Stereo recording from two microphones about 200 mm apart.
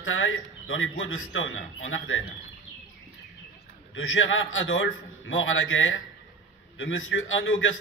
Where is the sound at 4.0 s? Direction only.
75° left (ahead or behind).